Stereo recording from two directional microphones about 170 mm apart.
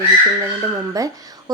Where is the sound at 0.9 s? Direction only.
20° right (ahead or behind).